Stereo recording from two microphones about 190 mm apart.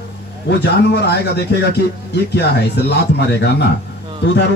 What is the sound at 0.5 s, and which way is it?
Speech, 60° left (ahead or behind).